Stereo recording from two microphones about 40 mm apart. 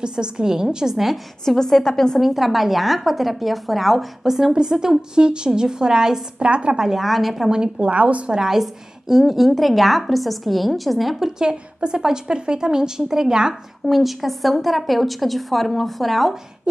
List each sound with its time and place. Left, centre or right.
0.0 s a woman's voice: right
0.9 s a woman's voice: centre
1.4 s a woman's voice: centre
2.1 s a woman's voice: centre
6.4 s a woman's voice: right
6.8 s a woman's voice: centre
7.8 s a woman's voice: right
8.3 s a woman's voice: centre
11.2 s a woman's voice: centre
13.8 s a woman's voice: centre